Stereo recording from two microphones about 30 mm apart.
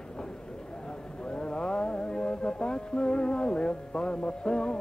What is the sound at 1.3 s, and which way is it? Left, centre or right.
Music, left.